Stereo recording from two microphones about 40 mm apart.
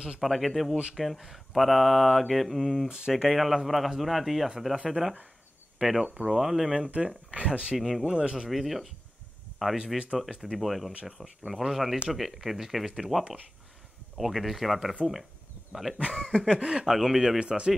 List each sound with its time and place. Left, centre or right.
0.2 s speech: centre
2.9 s speech: centre
3.3 s speech: centre
7.2 s speech: right
7.7 s speech: centre
8.0 s speech: centre
8.5 s speech: centre
14.1 s speech: centre
16.2 s a sound: left
16.5 s speech: right
16.9 s speech: centre
17.4 s speech: right